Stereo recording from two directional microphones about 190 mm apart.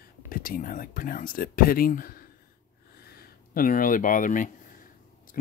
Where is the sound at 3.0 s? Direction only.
55° left (ahead or behind).